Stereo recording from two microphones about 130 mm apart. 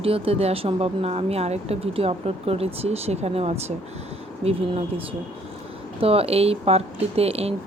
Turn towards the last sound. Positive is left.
turn(degrees=-50)  # may be behind; listen again after turning